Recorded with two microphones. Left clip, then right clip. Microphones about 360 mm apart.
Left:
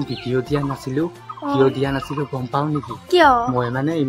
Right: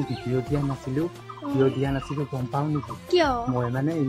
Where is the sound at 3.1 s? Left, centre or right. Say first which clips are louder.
Left 9 dB; right.